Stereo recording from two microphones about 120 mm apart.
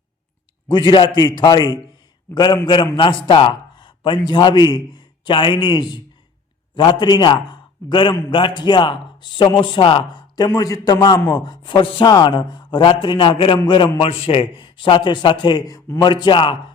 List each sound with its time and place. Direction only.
0.7 s a man's voice: 40° left (ahead or behind)